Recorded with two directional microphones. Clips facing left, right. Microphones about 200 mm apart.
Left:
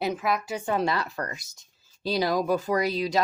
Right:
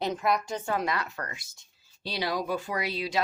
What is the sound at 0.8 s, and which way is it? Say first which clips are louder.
Speech: left 4 dB; 35° left (ahead or behind).